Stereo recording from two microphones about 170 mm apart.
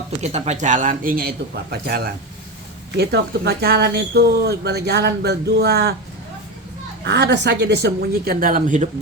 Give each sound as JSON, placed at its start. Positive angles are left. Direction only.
{"t": 0.2, "sound": "a man's voice", "side_deg": -40}
{"t": 7.0, "sound": "speech", "side_deg": -80}